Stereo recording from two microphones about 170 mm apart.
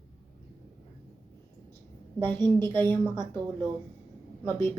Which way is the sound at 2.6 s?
15° left (ahead or behind).